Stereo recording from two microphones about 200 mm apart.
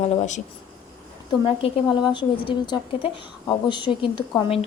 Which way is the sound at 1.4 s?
25° left (ahead or behind).